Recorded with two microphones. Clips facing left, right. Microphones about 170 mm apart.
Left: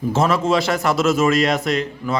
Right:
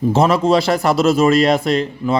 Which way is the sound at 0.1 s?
35° right (ahead or behind).